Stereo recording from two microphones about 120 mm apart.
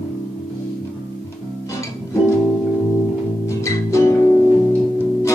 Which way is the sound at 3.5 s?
25° left (ahead or behind).